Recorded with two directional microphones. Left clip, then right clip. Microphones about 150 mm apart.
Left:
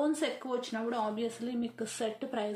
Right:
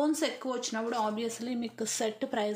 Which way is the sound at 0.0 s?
35° right (ahead or behind).